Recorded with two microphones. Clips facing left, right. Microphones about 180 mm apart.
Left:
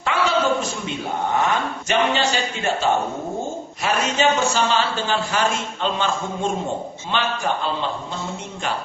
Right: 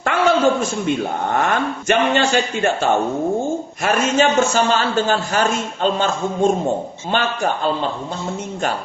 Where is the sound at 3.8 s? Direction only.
50° right (ahead or behind).